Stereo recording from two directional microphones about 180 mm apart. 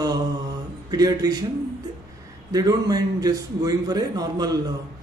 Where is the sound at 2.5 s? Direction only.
20° right (ahead or behind).